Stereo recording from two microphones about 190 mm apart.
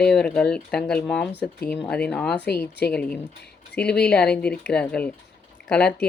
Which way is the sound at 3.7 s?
60° left (ahead or behind).